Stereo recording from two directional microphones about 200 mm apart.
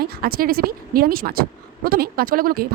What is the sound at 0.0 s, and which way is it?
A woman's voice, 50° right (ahead or behind).